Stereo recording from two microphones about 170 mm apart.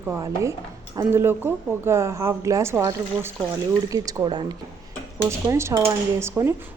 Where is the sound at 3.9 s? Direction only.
25° right (ahead or behind).